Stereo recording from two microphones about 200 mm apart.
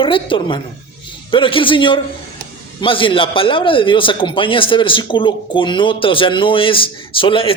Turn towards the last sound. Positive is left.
turn(degrees=25)  # may be behind; listen again after turning